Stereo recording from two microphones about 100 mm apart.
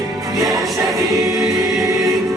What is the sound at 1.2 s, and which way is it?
Choir, 30° right (ahead or behind).